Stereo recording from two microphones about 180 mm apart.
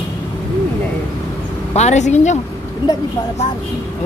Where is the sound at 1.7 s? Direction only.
40° left (ahead or behind).